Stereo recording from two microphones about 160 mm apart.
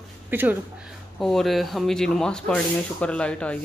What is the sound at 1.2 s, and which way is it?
Speech, 5° left (ahead or behind).